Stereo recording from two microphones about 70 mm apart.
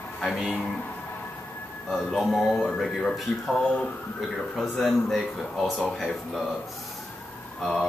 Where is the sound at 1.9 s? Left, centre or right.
Centre.